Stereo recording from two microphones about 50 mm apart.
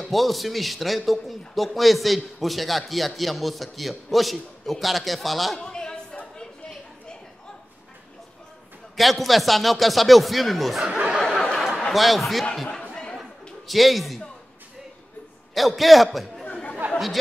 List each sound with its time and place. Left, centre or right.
0.0 s a man's voice: centre
5.6 s a sound: centre
8.9 s a man's voice: centre
11.1 s a sound: centre
11.9 s a man's voice: centre
13.7 s a man's voice: centre
15.5 s a man's voice: centre
16.8 s chatter: right